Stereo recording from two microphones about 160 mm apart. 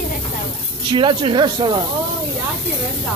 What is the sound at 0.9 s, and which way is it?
Speech, 30° right (ahead or behind).